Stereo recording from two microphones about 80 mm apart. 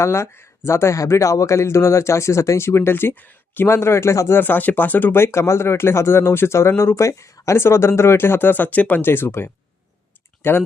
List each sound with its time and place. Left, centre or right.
0.0 s speech: left
4.4 s speech: left